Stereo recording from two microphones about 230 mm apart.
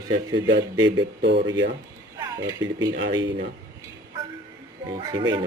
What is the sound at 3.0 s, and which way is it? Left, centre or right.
Speech, right.